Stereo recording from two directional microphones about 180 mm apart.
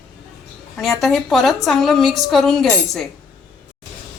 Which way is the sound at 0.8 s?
Centre (ahead or behind).